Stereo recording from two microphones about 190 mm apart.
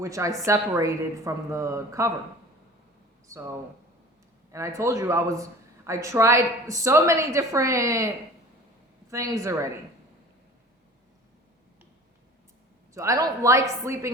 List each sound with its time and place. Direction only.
0.0 s a man's voice: 15° right (ahead or behind)
3.2 s speech: 15° right (ahead or behind)
4.5 s a man's voice: 15° right (ahead or behind)
12.9 s a man's voice: 15° right (ahead or behind)